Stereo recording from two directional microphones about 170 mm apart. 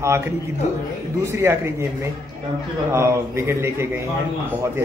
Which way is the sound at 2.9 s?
15° right (ahead or behind).